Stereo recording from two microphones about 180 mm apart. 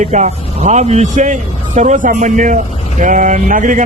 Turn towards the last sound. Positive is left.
turn(degrees=-45)  # may be behind; listen again after turning